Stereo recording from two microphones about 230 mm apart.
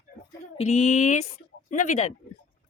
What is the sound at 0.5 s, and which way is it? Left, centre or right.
Speech, left.